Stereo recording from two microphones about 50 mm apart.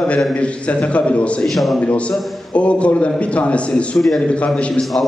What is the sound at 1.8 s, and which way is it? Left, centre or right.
A man's voice, left.